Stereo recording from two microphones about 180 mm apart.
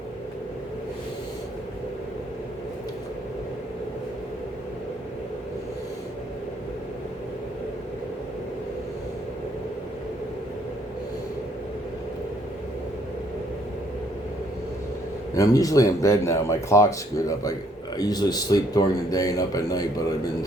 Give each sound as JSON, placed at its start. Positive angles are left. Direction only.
{"t": 15.4, "sound": "speech", "side_deg": 20}